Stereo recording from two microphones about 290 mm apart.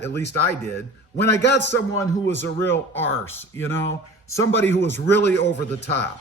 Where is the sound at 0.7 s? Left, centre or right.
Left.